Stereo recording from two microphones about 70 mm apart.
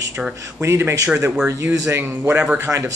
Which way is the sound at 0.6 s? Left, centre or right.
Right.